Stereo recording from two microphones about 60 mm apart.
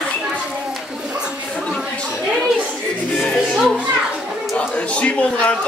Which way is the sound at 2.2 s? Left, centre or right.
Centre.